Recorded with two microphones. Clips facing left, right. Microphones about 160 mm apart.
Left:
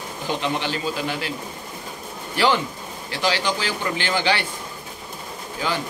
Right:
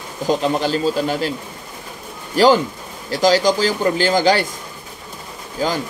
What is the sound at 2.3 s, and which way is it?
Speech, 40° right (ahead or behind).